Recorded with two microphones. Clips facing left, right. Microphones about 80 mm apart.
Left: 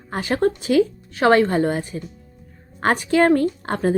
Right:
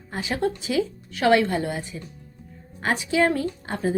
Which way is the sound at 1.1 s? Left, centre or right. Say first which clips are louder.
Left 3 dB; left.